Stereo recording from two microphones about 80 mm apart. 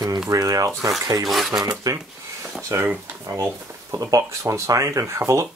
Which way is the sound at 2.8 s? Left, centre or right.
Right.